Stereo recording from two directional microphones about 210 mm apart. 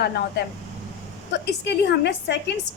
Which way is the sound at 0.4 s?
55° left (ahead or behind).